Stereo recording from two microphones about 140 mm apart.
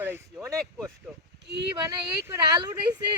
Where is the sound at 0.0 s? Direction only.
15° right (ahead or behind).